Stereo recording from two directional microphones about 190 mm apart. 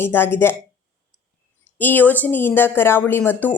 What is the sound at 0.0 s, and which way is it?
Speech, 10° left (ahead or behind).